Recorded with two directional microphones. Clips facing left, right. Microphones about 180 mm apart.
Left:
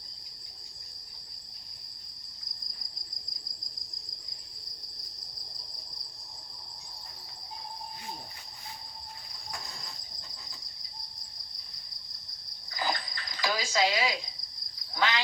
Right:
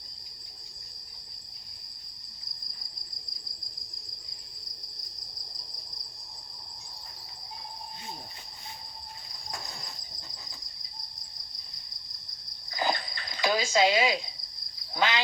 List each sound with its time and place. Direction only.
12.7 s cricket: 25° right (ahead or behind)